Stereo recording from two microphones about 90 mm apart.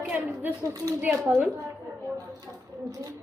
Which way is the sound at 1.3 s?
Centre (ahead or behind).